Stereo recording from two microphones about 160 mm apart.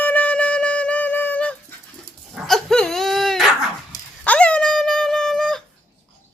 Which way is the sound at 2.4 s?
Centre (ahead or behind).